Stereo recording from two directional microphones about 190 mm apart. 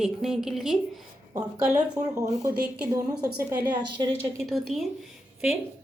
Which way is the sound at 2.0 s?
20° right (ahead or behind).